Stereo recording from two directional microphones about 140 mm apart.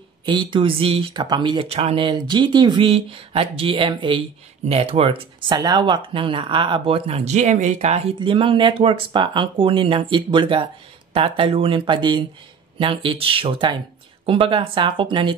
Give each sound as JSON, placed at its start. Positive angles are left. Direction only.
{"t": 0.2, "sound": "speech", "side_deg": -35}
{"t": 2.0, "sound": "speech", "side_deg": -35}
{"t": 8.2, "sound": "speech", "side_deg": -40}